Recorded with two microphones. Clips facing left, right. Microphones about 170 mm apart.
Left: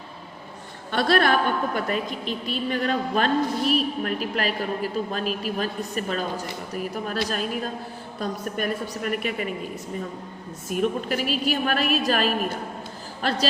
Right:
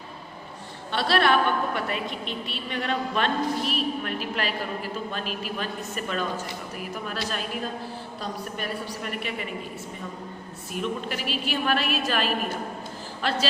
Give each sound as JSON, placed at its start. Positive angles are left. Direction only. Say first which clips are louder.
{"t": 0.9, "sound": "a woman's voice", "louder": "left 2 dB", "side_deg": 45}
{"t": 10.7, "sound": "a woman's voice", "louder": "left 6 dB", "side_deg": 45}